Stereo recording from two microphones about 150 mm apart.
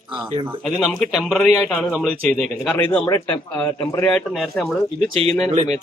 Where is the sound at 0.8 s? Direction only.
Centre (ahead or behind).